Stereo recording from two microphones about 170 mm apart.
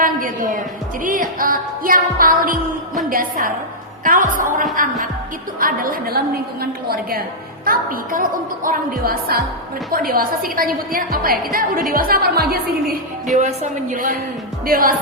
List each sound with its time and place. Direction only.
0.0 s a woman's voice: 50° right (ahead or behind)
13.4 s a woman's voice: 45° right (ahead or behind)